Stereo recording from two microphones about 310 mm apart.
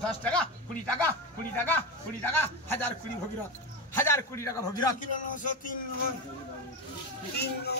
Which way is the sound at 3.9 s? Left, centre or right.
Centre.